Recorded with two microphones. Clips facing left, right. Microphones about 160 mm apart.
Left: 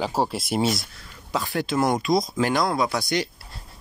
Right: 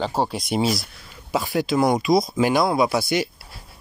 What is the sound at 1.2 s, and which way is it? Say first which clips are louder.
Speech: right 3 dB; 15° right (ahead or behind).